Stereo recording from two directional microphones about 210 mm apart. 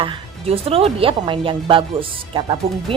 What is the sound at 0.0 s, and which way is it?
A woman's voice, 25° right (ahead or behind).